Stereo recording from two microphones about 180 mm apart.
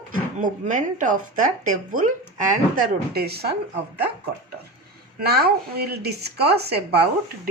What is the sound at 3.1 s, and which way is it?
Speech, 60° right (ahead or behind).